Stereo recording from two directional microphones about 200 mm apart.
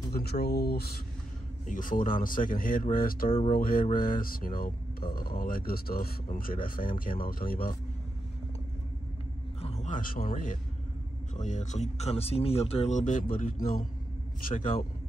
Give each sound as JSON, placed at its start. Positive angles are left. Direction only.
{"t": 0.1, "sound": "speech", "side_deg": 55}
{"t": 1.7, "sound": "speech", "side_deg": 40}
{"t": 9.6, "sound": "a man's voice", "side_deg": 30}